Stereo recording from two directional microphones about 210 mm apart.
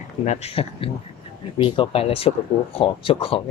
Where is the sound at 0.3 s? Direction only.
30° left (ahead or behind).